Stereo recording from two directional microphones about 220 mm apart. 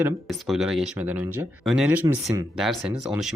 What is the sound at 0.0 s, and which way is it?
Speech, centre (ahead or behind).